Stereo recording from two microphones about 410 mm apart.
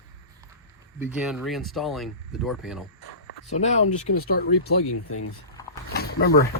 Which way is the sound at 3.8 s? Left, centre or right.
Left.